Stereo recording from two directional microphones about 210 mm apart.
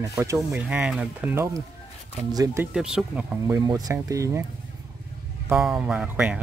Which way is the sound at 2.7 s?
5° right (ahead or behind).